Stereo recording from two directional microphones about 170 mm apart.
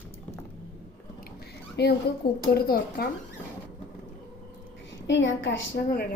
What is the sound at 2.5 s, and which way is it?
Speech, 65° left (ahead or behind).